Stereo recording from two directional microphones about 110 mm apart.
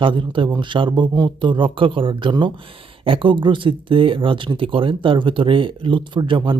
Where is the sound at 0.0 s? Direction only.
50° right (ahead or behind).